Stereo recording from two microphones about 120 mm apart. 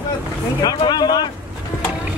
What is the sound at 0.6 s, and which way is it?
Speech, 35° left (ahead or behind).